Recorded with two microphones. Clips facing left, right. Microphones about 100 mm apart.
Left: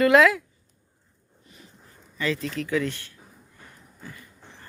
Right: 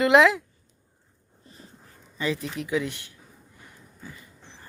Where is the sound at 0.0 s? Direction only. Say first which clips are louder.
Left 1 dB; 20° right (ahead or behind).